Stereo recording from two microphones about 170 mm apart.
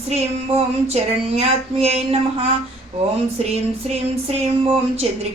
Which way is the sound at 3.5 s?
40° right (ahead or behind).